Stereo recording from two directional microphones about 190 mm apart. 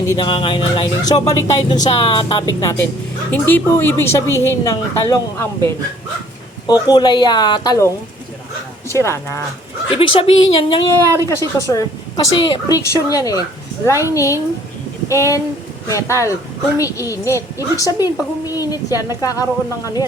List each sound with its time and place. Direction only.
0.1 s a woman's voice: 25° left (ahead or behind)
6.8 s a woman's voice: 20° left (ahead or behind)
8.9 s a woman's voice: 15° left (ahead or behind)
9.9 s a woman's voice: 25° left (ahead or behind)
11.3 s a woman's voice: 15° left (ahead or behind)